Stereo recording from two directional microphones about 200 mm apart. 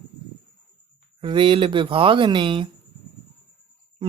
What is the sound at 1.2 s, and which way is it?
Speech, 25° right (ahead or behind).